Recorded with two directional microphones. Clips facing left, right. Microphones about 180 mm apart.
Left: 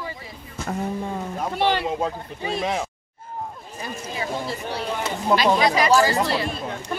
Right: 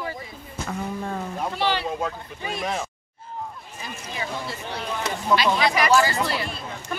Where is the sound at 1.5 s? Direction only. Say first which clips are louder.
Left 4 dB; 55° left (ahead or behind).